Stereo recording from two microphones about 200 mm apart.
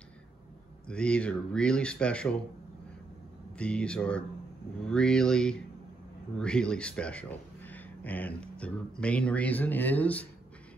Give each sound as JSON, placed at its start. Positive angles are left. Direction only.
{"t": 0.8, "sound": "speech", "side_deg": 5}
{"t": 3.5, "sound": "speech", "side_deg": 5}